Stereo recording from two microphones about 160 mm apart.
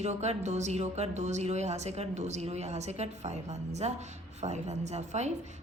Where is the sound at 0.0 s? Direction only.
45° right (ahead or behind).